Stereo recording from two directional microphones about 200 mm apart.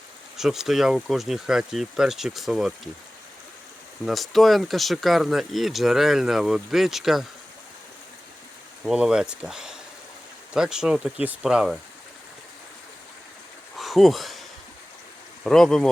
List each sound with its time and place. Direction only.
0.3 s speech: centre (ahead or behind)
4.0 s speech: centre (ahead or behind)
8.8 s speech: 5° right (ahead or behind)
13.7 s a sound: centre (ahead or behind)
15.4 s speech: centre (ahead or behind)